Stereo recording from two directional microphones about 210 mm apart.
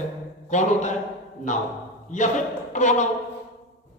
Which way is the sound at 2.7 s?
35° left (ahead or behind).